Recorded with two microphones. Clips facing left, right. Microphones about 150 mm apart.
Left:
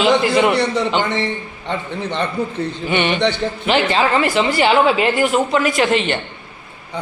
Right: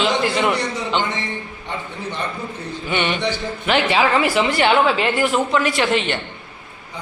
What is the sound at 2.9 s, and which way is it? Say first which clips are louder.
Speech: left 4 dB; 55° left (ahead or behind).